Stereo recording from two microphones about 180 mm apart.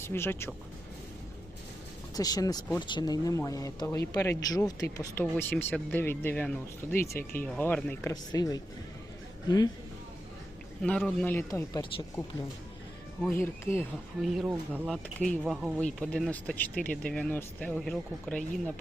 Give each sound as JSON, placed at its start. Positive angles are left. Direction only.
{"t": 0.0, "sound": "speech", "side_deg": 10}
{"t": 2.1, "sound": "speech", "side_deg": 20}
{"t": 8.1, "sound": "speech", "side_deg": 20}
{"t": 10.8, "sound": "speech", "side_deg": 5}
{"t": 11.7, "sound": "speech", "side_deg": 25}
{"t": 13.3, "sound": "speech", "side_deg": 15}
{"t": 14.2, "sound": "speech", "side_deg": 0}
{"t": 14.8, "sound": "speech", "side_deg": 5}